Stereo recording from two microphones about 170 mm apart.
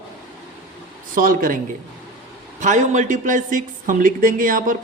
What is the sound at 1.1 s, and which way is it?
Speech, 55° right (ahead or behind).